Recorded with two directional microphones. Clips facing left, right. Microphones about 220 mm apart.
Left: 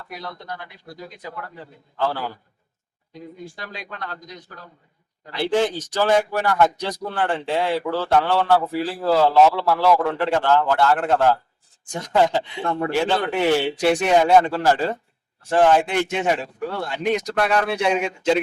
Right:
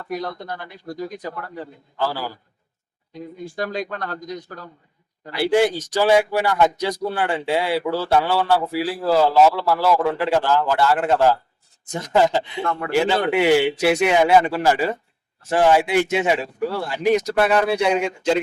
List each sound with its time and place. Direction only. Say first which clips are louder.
0.1 s speech: right 7 dB; 45° right (ahead or behind)
2.0 s speech: left 1 dB; 5° right (ahead or behind)
3.5 s speech: right 10 dB; 45° right (ahead or behind)
5.3 s speech: right 3 dB; 10° right (ahead or behind)